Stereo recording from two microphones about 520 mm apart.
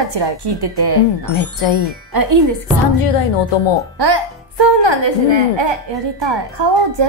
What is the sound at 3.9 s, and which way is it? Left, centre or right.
A woman's voice, right.